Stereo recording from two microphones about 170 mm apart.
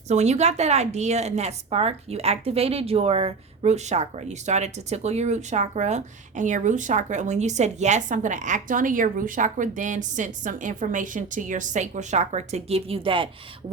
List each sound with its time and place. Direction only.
0.1 s a woman's voice: 40° right (ahead or behind)